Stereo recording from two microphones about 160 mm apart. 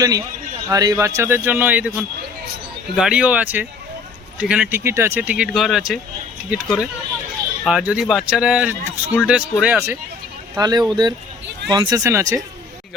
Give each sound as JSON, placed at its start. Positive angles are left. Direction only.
{"t": 0.0, "sound": "speech", "side_deg": -20}
{"t": 10.5, "sound": "speech", "side_deg": -25}